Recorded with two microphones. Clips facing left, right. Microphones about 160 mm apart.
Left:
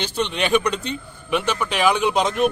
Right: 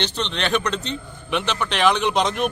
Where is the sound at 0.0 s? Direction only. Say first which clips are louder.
Left 2 dB; 10° left (ahead or behind).